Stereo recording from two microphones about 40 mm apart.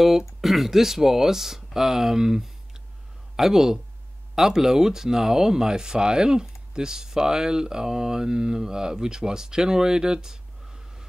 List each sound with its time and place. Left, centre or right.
0.0 s speech: centre